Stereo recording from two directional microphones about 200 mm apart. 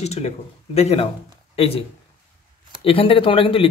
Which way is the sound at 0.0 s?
35° left (ahead or behind).